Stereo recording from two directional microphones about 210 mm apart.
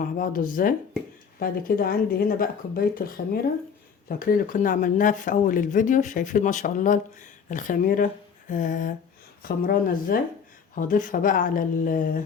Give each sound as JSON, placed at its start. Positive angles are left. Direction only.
{"t": 0.0, "sound": "speech", "side_deg": 40}
{"t": 4.2, "sound": "speech", "side_deg": 40}